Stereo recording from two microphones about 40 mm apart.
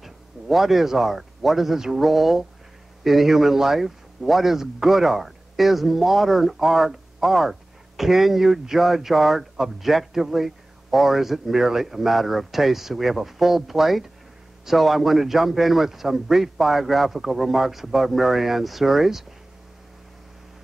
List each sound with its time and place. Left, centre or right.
0.0 s a man's voice: centre